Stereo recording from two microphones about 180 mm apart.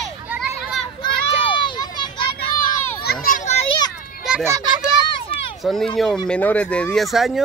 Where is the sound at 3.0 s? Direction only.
55° left (ahead or behind).